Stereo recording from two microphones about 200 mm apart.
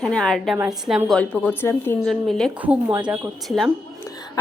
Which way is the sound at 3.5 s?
Centre (ahead or behind).